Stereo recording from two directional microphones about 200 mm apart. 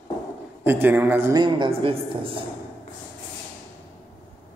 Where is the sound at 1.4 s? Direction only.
25° right (ahead or behind).